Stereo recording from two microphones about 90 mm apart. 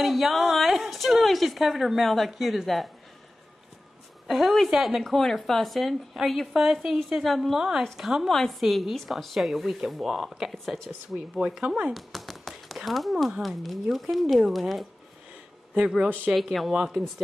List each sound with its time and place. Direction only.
0.0 s a woman's voice: centre (ahead or behind)
4.3 s a woman's voice: centre (ahead or behind)
11.9 s speech: centre (ahead or behind)
16.0 s speech: 15° right (ahead or behind)
16.3 s a woman's voice: centre (ahead or behind)